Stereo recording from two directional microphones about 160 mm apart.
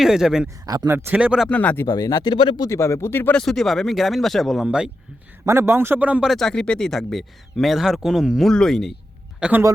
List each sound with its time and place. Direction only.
0.0 s speech: 5° right (ahead or behind)
0.4 s speech: 25° right (ahead or behind)
0.9 s speech: 10° right (ahead or behind)
1.5 s speech: 10° left (ahead or behind)
1.9 s speech: 25° left (ahead or behind)
2.6 s speech: 15° left (ahead or behind); by 4.9 s 5° right (ahead or behind)
5.5 s speech: 15° right (ahead or behind); by 8.9 s 5° left (ahead or behind)
9.4 s speech: 10° right (ahead or behind)